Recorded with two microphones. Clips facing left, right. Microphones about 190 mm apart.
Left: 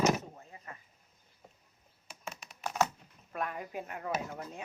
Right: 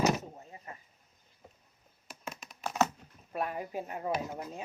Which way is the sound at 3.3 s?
25° right (ahead or behind).